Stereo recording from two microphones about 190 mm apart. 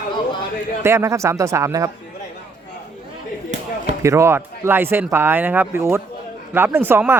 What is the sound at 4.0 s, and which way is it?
Speech, 15° right (ahead or behind).